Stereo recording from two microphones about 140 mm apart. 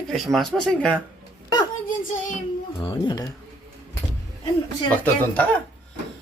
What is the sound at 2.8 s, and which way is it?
Speech, 35° left (ahead or behind).